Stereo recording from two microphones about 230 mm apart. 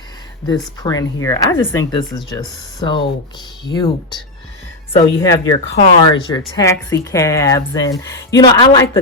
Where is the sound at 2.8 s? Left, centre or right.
Left.